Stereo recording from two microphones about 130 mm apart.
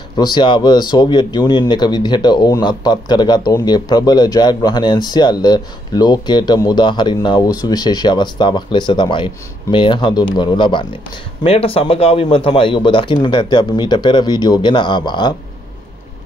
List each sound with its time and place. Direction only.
0.1 s speech: 35° left (ahead or behind)
11.4 s speech: 50° left (ahead or behind)